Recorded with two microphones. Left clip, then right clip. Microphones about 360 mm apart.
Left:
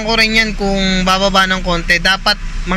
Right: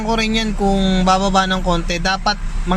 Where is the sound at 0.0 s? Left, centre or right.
Centre.